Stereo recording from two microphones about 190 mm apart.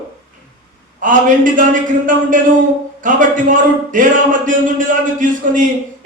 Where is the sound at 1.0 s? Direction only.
45° right (ahead or behind).